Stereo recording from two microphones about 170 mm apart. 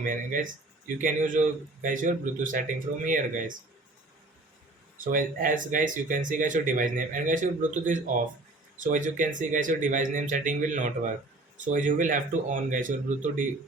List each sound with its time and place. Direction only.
0.0 s speech: 50° right (ahead or behind)
1.8 s speech: 50° right (ahead or behind)
5.1 s speech: 55° right (ahead or behind)